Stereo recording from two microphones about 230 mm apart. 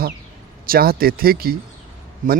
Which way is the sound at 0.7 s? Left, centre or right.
Right.